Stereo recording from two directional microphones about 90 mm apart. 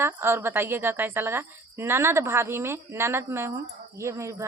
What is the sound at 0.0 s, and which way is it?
Speech, 25° right (ahead or behind).